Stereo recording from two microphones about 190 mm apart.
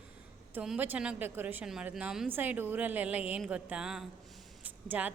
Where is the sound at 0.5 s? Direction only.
5° right (ahead or behind).